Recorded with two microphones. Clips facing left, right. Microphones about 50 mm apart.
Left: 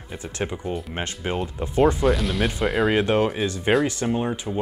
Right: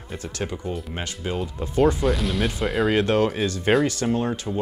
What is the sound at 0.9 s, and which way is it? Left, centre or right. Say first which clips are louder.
Speech: left 1 dB; left.